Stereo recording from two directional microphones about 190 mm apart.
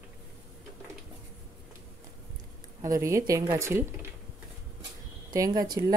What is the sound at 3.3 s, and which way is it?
Speech, 15° right (ahead or behind).